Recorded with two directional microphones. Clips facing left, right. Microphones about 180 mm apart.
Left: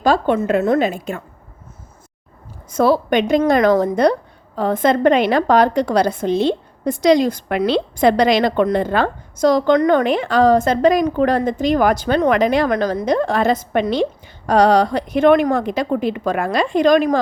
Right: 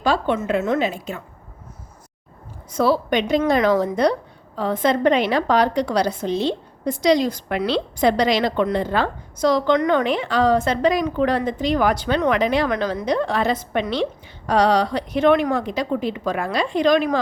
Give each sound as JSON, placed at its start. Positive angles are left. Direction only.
{"t": 0.0, "sound": "a woman's voice", "side_deg": 45}
{"t": 2.6, "sound": "a woman's voice", "side_deg": 50}